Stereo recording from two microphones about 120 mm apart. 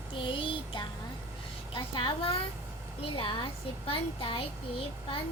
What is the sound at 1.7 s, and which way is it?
A woman's voice, 40° left (ahead or behind).